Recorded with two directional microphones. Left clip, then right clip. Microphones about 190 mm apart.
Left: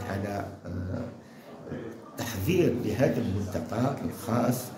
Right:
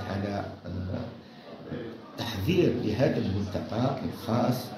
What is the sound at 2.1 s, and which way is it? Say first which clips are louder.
A man's voice: even; 5° left (ahead or behind).